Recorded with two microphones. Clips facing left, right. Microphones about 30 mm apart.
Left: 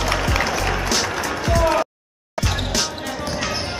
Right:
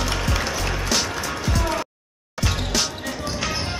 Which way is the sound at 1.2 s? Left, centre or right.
Centre.